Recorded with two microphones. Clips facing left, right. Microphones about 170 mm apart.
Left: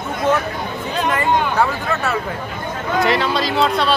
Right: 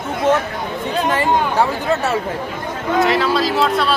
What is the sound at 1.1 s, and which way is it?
Speech, 25° right (ahead or behind).